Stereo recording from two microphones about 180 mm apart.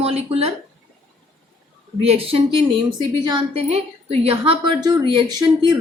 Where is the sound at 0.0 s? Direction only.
35° right (ahead or behind).